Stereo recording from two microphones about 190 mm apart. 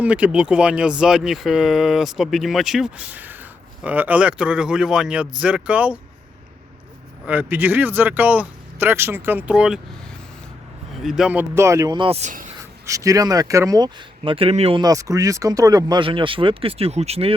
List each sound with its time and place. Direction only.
0.0 s speech: 5° right (ahead or behind)
7.3 s speech: 10° right (ahead or behind)
11.0 s speech: 5° right (ahead or behind); by 12.5 s 40° right (ahead or behind)
12.8 s speech: 15° right (ahead or behind); by 17.3 s 30° right (ahead or behind)